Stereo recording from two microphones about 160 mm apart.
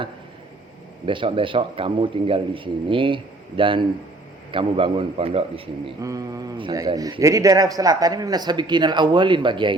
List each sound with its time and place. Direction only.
1.0 s a man's voice: 30° right (ahead or behind)
6.0 s a man's voice: 20° right (ahead or behind)